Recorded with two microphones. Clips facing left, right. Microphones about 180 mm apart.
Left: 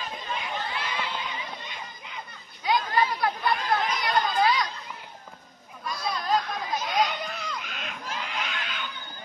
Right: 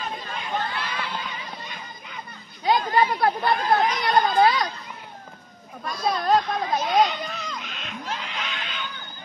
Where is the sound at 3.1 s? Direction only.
50° right (ahead or behind).